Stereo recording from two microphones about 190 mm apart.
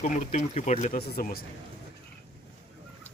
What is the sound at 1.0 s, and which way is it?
Speech, 55° left (ahead or behind).